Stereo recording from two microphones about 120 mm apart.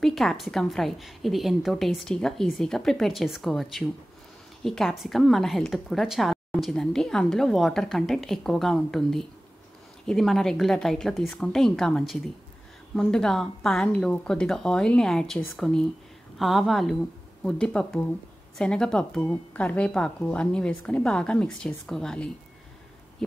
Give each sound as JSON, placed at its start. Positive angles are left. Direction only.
{"t": 0.0, "sound": "a woman's voice", "side_deg": 0}